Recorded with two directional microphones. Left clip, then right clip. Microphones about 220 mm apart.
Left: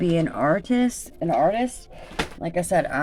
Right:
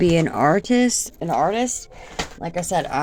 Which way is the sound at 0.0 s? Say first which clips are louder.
Right 5 dB; 30° right (ahead or behind).